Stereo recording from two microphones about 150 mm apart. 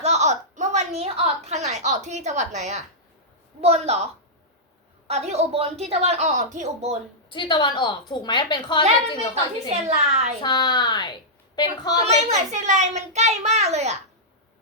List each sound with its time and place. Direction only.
0.0 s a sound: 50° right (ahead or behind)
3.6 s a child's voice: 45° right (ahead or behind)
5.0 s a child's voice: 45° right (ahead or behind)
7.3 s a woman's voice: 30° left (ahead or behind)
9.8 s a child's voice: 50° right (ahead or behind)
10.4 s a woman's voice: 30° left (ahead or behind)
12.0 s a child's voice: 45° right (ahead or behind)